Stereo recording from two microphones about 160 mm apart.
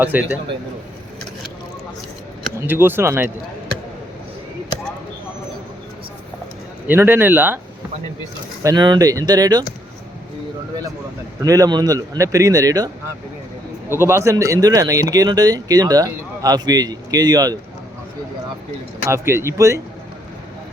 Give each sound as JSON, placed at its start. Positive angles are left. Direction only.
{"t": 0.0, "sound": "speech", "side_deg": -10}
{"t": 2.6, "sound": "speech", "side_deg": -15}
{"t": 6.8, "sound": "speech", "side_deg": -10}
{"t": 8.6, "sound": "speech", "side_deg": -25}
{"t": 11.4, "sound": "speech", "side_deg": -20}
{"t": 19.0, "sound": "speech", "side_deg": -15}